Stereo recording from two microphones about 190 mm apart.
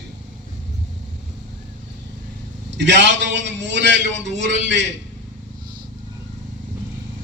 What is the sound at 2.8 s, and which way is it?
A man's voice, 65° right (ahead or behind).